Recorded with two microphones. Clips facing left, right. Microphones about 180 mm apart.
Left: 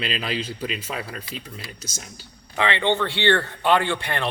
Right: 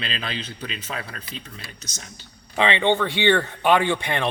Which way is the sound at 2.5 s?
20° right (ahead or behind).